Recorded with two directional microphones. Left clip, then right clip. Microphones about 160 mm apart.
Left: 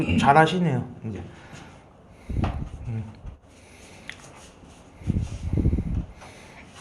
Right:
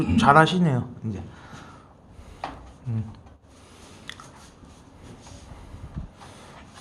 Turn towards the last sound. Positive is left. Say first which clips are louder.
# even
turn(degrees=-40)  # may be behind; listen again after turning